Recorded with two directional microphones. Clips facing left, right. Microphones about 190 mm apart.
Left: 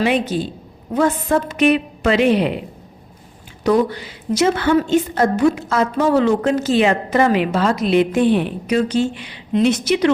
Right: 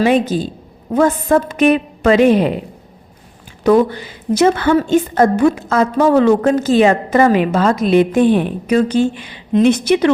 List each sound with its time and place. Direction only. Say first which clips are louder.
0.0 s a woman's voice: right 4 dB; 40° right (ahead or behind)
4.4 s a woman's voice: right 3 dB; 50° right (ahead or behind)